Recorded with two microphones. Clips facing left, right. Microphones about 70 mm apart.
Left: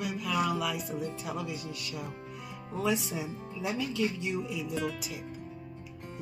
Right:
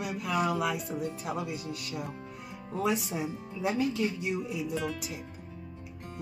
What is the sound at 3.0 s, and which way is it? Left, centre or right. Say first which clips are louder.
Speech: right 2 dB; right.